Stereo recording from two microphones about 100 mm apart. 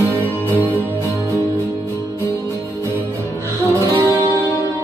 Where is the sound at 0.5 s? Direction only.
20° right (ahead or behind).